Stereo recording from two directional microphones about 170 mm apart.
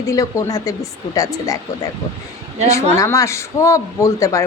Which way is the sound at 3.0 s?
15° left (ahead or behind).